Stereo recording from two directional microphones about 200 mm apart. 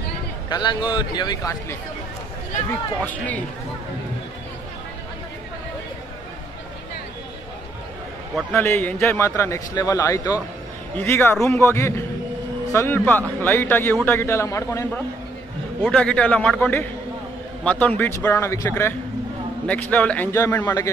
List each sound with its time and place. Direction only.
0.5 s a man's voice: 20° left (ahead or behind)
3.0 s a man's voice: 10° left (ahead or behind)
8.4 s a man's voice: 5° left (ahead or behind)